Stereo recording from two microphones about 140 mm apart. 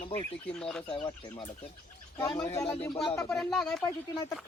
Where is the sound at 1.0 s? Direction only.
35° left (ahead or behind).